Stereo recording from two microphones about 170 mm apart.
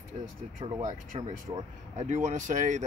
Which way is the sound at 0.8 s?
55° right (ahead or behind).